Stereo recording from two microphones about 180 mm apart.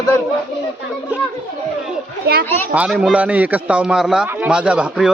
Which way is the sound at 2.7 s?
5° right (ahead or behind).